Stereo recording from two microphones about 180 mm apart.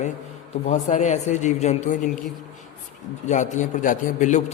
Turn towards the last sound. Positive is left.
turn(degrees=40)  # may be behind; listen again after turning